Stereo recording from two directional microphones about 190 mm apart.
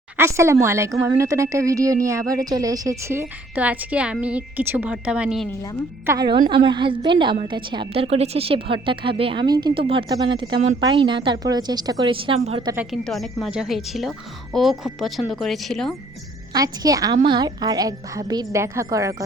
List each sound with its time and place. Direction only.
0.2 s a woman's voice: 15° right (ahead or behind)
6.1 s a woman's voice: 20° right (ahead or behind)
12.7 s a woman's voice: 5° right (ahead or behind)
16.5 s a woman's voice: 20° right (ahead or behind)